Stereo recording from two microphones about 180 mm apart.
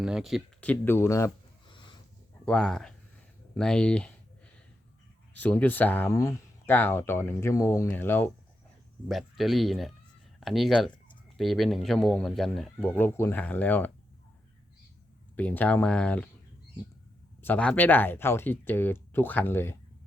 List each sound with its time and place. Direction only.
0.0 s speech: 5° right (ahead or behind); by 1.3 s 15° left (ahead or behind)
1.7 s a sound: 25° left (ahead or behind)
2.4 s speech: 5° left (ahead or behind)
5.3 s speech: 10° left (ahead or behind)
9.0 s speech: centre (ahead or behind)
15.4 s speech: 10° left (ahead or behind)
17.4 s speech: 5° left (ahead or behind)